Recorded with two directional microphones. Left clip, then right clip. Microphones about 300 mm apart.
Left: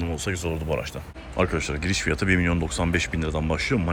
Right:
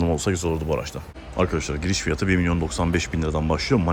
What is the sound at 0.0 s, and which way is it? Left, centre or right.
Speech, centre.